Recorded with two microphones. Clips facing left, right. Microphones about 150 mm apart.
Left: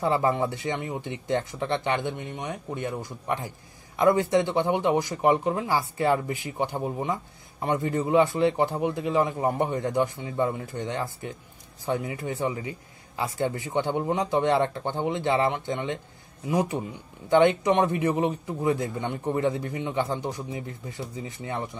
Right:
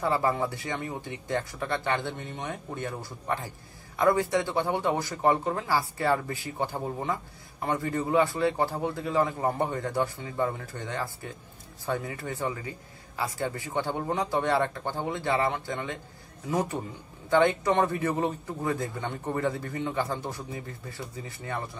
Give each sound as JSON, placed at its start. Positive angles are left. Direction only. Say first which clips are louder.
{"t": 0.0, "sound": "a man's voice", "louder": "left 3 dB", "side_deg": 20}